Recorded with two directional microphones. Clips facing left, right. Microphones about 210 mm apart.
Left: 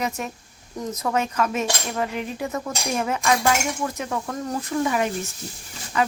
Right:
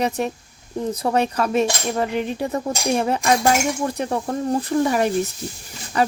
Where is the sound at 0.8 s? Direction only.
30° right (ahead or behind).